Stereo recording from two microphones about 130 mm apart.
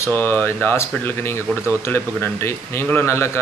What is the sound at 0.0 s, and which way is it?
Speech, 15° left (ahead or behind).